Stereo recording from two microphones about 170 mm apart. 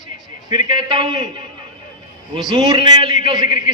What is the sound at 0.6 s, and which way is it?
Speech, 30° right (ahead or behind).